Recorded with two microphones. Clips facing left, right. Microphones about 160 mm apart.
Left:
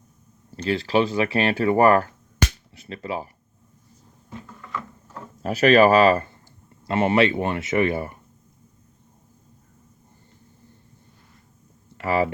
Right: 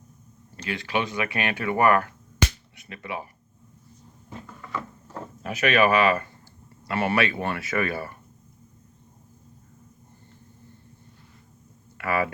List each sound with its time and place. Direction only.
0.5 s speech: 35° left (ahead or behind)
5.4 s speech: 35° left (ahead or behind)
6.8 s speech: 20° left (ahead or behind)
11.9 s speech: 25° left (ahead or behind)